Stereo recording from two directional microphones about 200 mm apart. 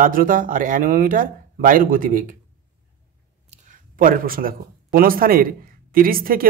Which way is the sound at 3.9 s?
45° right (ahead or behind).